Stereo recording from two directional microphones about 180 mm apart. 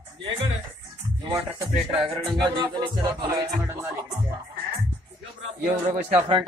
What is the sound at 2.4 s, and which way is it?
Speech, 25° right (ahead or behind).